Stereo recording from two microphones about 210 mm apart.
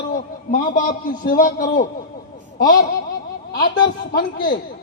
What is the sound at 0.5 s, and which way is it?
A man's voice, 40° left (ahead or behind).